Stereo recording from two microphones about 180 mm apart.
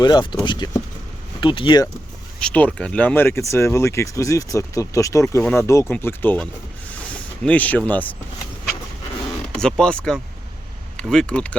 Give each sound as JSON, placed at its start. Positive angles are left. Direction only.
{"t": 0.0, "sound": "speech", "side_deg": 25}
{"t": 2.4, "sound": "speech", "side_deg": 5}
{"t": 9.6, "sound": "speech", "side_deg": 5}